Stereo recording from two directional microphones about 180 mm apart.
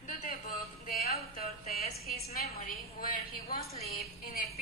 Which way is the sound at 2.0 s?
55° left (ahead or behind).